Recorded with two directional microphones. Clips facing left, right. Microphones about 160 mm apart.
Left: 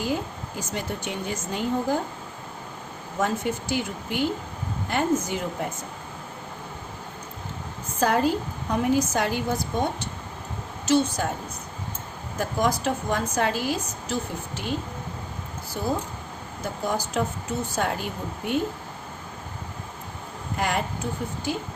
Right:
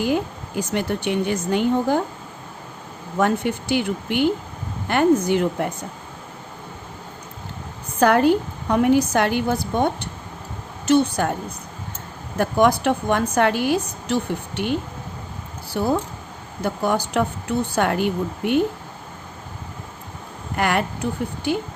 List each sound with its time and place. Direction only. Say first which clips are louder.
0.7 s a woman's voice: right 8 dB; 70° right (ahead or behind)
3.2 s a woman's voice: right 5 dB; 70° right (ahead or behind)
7.9 s a woman's voice: right 6 dB; 70° right (ahead or behind)
12.4 s a woman's voice: right 7 dB; 65° right (ahead or behind)
20.6 s a woman's voice: right 5 dB; 70° right (ahead or behind)